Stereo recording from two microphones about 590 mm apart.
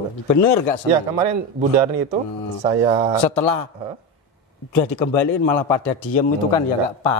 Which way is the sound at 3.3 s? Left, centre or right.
Left.